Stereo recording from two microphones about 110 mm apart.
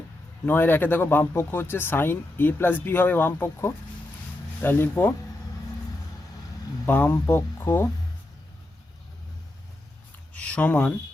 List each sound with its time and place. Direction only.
0.4 s speech: 15° left (ahead or behind)
6.8 s speech: 20° left (ahead or behind)
10.3 s a sound: 10° left (ahead or behind)